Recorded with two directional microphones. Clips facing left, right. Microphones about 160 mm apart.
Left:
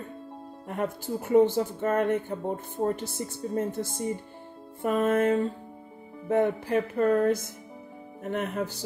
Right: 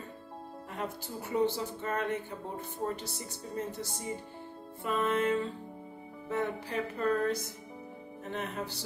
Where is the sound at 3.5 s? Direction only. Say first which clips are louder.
Left 7 dB; 50° left (ahead or behind).